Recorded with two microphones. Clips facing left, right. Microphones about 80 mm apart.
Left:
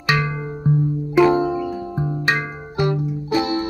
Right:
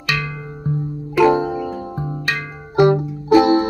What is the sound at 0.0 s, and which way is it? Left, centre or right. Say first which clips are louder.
Music: left 3 dB; left.